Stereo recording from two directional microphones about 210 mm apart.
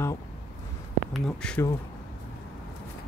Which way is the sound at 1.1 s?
5° left (ahead or behind).